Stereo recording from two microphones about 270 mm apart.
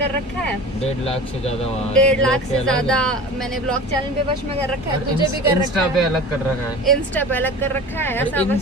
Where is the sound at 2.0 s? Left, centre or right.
Centre.